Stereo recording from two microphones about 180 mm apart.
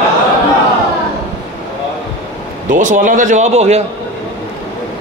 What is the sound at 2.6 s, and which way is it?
A man's voice, 45° right (ahead or behind).